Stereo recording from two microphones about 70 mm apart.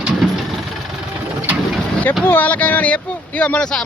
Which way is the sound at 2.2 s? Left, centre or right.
Left.